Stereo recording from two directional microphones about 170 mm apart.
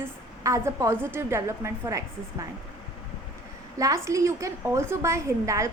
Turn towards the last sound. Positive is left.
turn(degrees=-20)  # may be behind; listen again after turning